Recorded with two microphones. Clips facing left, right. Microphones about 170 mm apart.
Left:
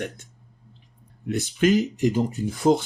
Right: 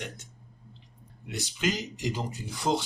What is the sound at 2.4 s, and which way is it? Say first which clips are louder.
Speech: left 13 dB; 45° left (ahead or behind).